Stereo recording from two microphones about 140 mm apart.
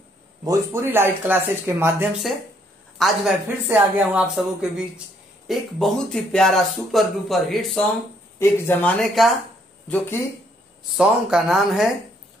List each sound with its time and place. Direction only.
0.5 s speech: 20° right (ahead or behind)
2.3 s speech: centre (ahead or behind)
3.4 s speech: 10° right (ahead or behind); by 7.9 s 5° left (ahead or behind)
8.4 s speech: 15° left (ahead or behind)
9.8 s speech: 15° left (ahead or behind)
11.0 s speech: 5° right (ahead or behind)